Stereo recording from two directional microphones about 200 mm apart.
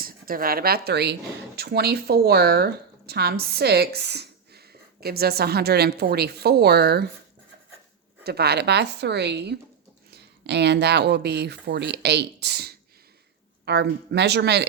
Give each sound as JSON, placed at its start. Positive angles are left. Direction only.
{"t": 0.0, "sound": "speech", "side_deg": -45}
{"t": 8.2, "sound": "speech", "side_deg": -55}